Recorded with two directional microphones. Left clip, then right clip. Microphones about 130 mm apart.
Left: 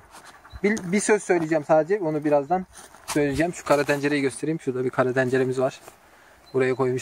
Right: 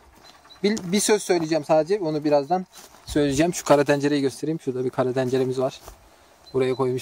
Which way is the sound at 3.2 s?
90° right.